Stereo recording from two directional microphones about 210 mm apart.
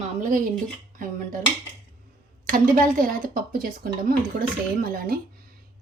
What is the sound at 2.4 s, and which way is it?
Speech, 40° right (ahead or behind).